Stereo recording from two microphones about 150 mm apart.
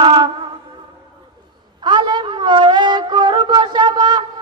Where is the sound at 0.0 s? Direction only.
30° right (ahead or behind).